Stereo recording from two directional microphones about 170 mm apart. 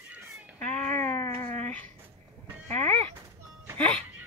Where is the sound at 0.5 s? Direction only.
5° left (ahead or behind).